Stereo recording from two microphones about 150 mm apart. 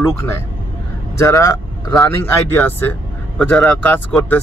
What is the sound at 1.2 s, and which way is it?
A man's voice, 20° left (ahead or behind).